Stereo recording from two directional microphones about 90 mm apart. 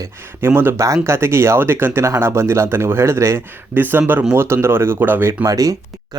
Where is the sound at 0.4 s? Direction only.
25° right (ahead or behind).